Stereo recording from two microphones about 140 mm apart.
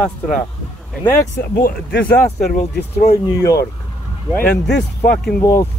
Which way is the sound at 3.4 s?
20° left (ahead or behind).